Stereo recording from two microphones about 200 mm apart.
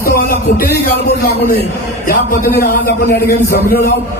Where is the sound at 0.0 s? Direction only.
45° left (ahead or behind).